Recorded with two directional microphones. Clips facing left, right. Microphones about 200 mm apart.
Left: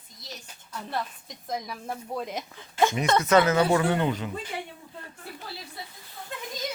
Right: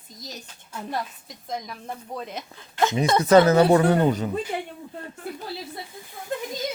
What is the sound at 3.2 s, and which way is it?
A woman's voice, 35° right (ahead or behind).